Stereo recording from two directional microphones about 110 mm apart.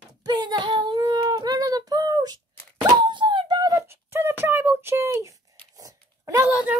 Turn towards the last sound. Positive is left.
turn(degrees=-10)  # may be behind; listen again after turning